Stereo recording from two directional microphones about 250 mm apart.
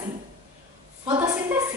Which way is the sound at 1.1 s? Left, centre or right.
Centre.